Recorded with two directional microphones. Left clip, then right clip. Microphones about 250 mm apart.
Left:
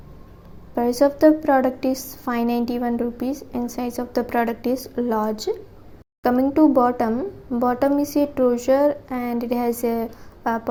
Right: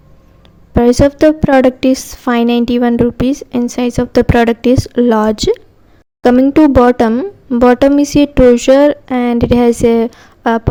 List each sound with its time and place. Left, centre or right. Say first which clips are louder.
0.8 s a woman's voice: right 8 dB; right